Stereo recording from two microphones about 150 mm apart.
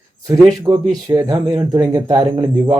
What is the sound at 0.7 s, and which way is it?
Speech, 20° right (ahead or behind).